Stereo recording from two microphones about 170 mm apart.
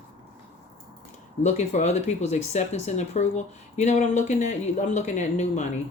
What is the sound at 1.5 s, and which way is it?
Speech, 40° left (ahead or behind).